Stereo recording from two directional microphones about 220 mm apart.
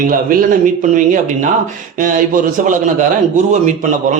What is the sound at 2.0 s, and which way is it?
A man's voice, 35° right (ahead or behind).